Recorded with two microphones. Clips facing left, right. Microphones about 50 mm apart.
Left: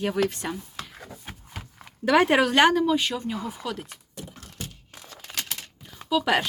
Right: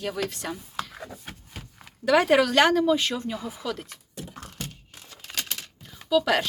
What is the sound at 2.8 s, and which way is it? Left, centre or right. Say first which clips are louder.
Speech: even; centre.